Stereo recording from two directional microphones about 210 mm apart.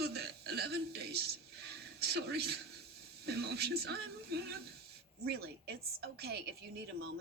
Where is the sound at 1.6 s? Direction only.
50° right (ahead or behind).